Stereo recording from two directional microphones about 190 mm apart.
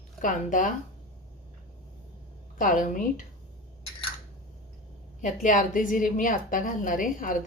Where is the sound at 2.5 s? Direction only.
45° left (ahead or behind).